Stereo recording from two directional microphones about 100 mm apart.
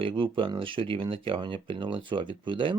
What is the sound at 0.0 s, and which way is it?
Speech, 60° right (ahead or behind).